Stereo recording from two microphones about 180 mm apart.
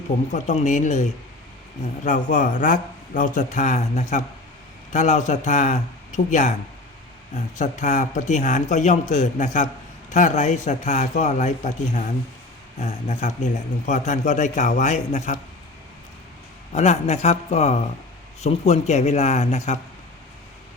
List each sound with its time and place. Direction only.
0.3 s a man's voice: 40° left (ahead or behind)
2.0 s a man's voice: 45° left (ahead or behind)
16.7 s a man's voice: 40° left (ahead or behind)